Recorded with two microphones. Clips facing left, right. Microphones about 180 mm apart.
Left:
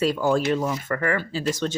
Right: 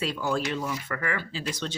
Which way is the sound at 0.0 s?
45° left (ahead or behind).